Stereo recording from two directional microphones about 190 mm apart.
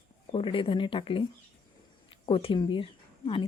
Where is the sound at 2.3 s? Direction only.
30° left (ahead or behind).